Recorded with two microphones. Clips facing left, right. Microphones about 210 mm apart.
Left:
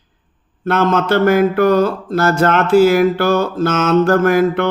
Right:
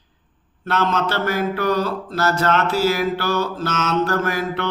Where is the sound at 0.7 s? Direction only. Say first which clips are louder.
Left 7 dB; 50° left (ahead or behind).